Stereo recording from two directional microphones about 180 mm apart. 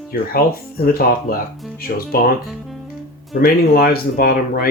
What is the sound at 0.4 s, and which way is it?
Speech, 55° left (ahead or behind).